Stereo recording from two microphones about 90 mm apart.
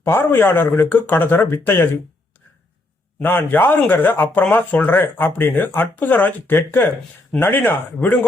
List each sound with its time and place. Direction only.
0.0 s speech: 25° left (ahead or behind)
3.2 s speech: 20° left (ahead or behind)